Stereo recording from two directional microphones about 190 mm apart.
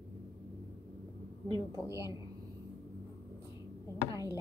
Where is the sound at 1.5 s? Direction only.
15° right (ahead or behind).